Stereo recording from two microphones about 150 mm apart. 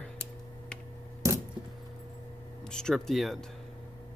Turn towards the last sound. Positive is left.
turn(degrees=0)  # may be behind; listen again after turning